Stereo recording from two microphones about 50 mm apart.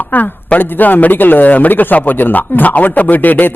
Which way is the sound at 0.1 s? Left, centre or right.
Left.